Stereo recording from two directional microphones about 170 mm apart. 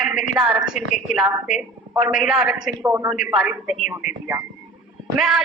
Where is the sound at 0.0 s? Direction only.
5° right (ahead or behind).